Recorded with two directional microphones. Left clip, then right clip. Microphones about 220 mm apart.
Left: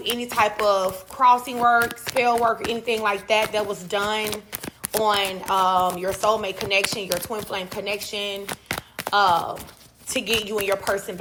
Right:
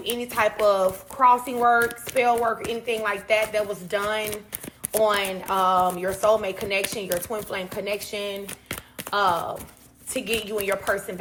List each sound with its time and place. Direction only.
0.0 s speech: 5° left (ahead or behind)
8.4 s a sound: 35° left (ahead or behind)
9.0 s speech: 5° left (ahead or behind)
10.5 s speech: centre (ahead or behind)